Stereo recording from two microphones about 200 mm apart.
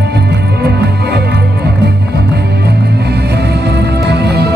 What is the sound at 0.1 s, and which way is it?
Music, 55° right (ahead or behind).